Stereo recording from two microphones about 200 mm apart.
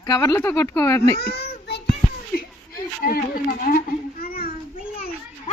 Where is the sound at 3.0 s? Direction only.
45° left (ahead or behind).